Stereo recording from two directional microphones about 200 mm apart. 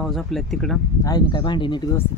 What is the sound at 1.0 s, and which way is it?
Speech, 20° left (ahead or behind).